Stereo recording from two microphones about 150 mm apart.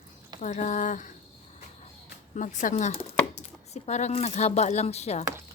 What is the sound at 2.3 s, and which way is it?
Chopping, 55° left (ahead or behind).